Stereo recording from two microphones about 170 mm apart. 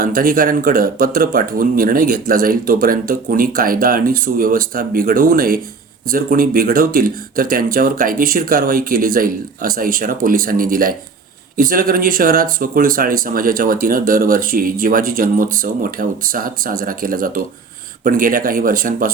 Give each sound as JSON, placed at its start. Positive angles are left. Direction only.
{"t": 0.0, "sound": "speech", "side_deg": -55}